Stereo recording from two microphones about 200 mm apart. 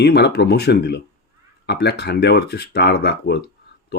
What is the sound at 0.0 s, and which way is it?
Speech, 55° left (ahead or behind).